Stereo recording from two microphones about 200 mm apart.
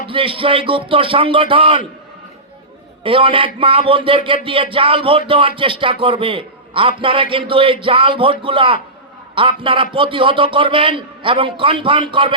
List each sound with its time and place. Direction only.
0.1 s a man's voice: 25° right (ahead or behind)
3.0 s a man's voice: 25° right (ahead or behind)